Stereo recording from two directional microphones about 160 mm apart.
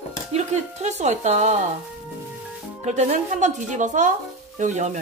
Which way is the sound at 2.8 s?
45° right (ahead or behind).